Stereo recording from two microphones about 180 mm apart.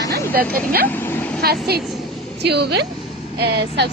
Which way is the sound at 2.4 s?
70° right (ahead or behind).